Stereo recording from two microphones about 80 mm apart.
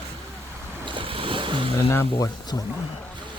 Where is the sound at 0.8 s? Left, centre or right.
Right.